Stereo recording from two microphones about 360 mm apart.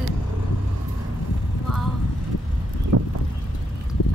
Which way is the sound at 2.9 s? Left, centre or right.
Right.